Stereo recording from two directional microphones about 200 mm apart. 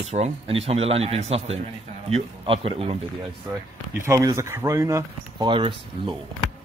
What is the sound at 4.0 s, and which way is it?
Speech, 15° right (ahead or behind).